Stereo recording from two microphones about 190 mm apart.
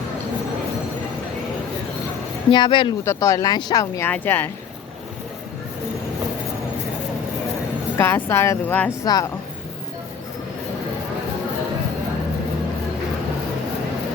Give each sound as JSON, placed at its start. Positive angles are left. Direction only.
{"t": 2.5, "sound": "speech", "side_deg": 25}
{"t": 7.9, "sound": "speech", "side_deg": 15}